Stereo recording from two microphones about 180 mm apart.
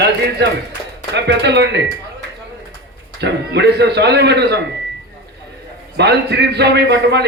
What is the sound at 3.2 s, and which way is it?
A man's voice, 70° right (ahead or behind).